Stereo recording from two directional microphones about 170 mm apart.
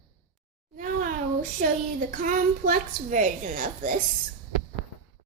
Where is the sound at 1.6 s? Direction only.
50° right (ahead or behind).